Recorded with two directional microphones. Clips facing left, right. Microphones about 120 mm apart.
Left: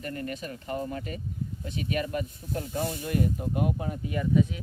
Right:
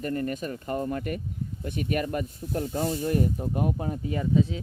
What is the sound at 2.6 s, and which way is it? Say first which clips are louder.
Speech: right 4 dB; 40° right (ahead or behind).